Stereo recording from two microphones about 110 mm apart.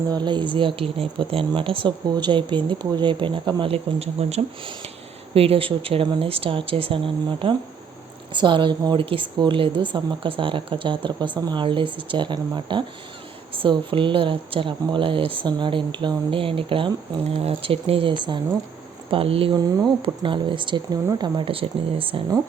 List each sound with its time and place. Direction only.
0.1 s a woman's voice: 40° right (ahead or behind)
2.0 s a woman's voice: 40° right (ahead or behind)
19.1 s speech: 60° right (ahead or behind)
20.0 s a woman's voice: 50° right (ahead or behind)